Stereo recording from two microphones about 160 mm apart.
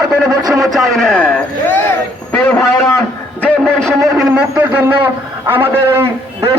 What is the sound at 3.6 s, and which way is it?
A man's voice, 5° left (ahead or behind).